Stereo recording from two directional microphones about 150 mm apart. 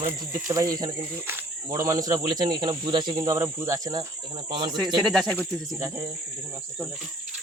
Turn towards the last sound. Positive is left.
turn(degrees=-20)  # may be behind; listen again after turning